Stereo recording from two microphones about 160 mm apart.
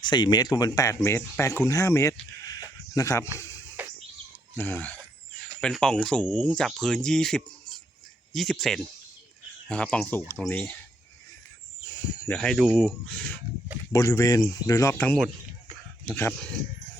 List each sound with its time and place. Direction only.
0.0 s speech: 25° left (ahead or behind)
3.3 s a sound: 20° left (ahead or behind)
4.5 s speech: 15° left (ahead or behind)
12.3 s speech: centre (ahead or behind)
13.9 s speech: 20° left (ahead or behind)